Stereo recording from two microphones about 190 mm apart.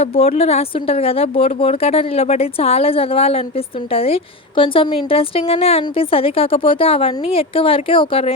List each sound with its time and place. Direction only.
0.0 s a woman's voice: 30° left (ahead or behind)